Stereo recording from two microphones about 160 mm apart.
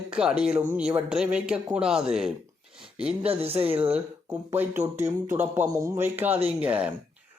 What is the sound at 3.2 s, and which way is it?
Speech, 40° right (ahead or behind).